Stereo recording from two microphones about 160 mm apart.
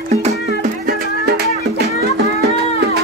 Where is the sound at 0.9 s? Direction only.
85° right.